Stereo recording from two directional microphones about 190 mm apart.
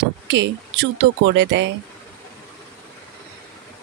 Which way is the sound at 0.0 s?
65° right (ahead or behind).